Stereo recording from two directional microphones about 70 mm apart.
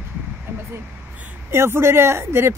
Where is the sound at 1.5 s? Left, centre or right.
Right.